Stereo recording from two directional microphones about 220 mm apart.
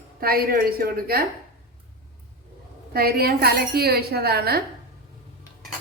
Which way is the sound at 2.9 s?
45° right (ahead or behind).